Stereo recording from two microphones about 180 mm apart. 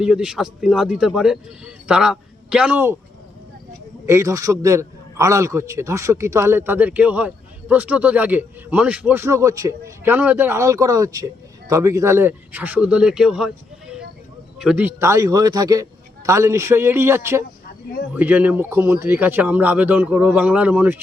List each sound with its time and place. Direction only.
0.0 s speech: 5° right (ahead or behind)
4.0 s a man's voice: 15° right (ahead or behind)
14.6 s a man's voice: 5° right (ahead or behind)